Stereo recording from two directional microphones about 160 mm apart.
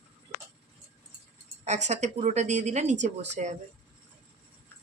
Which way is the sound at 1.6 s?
45° right (ahead or behind).